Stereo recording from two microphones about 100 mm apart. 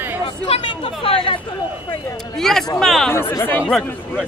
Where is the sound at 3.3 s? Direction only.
20° left (ahead or behind).